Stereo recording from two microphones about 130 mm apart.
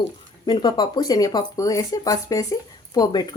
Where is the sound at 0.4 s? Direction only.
35° left (ahead or behind).